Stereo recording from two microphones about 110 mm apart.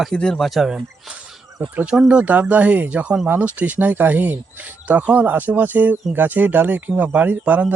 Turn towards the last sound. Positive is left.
turn(degrees=-15)  # may be behind; listen again after turning